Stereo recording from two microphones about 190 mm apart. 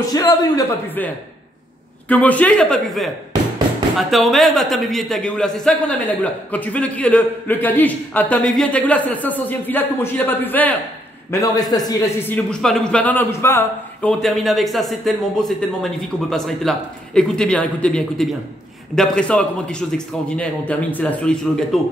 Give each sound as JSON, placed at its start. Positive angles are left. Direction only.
{"t": 0.1, "sound": "speech", "side_deg": 20}
{"t": 4.1, "sound": "speech", "side_deg": 0}
{"t": 14.2, "sound": "speech", "side_deg": 0}